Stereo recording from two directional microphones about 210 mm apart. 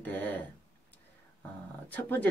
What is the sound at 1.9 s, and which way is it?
Speech, 5° left (ahead or behind).